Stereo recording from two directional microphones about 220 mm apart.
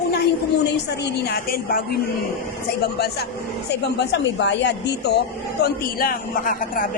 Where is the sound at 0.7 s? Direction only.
50° left (ahead or behind).